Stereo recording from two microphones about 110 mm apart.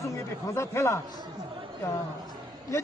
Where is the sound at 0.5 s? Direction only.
25° left (ahead or behind).